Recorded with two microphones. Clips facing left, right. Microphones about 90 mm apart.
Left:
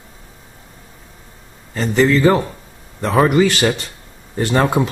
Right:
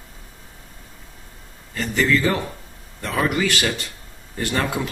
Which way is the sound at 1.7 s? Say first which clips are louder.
Left 6 dB; 30° left (ahead or behind).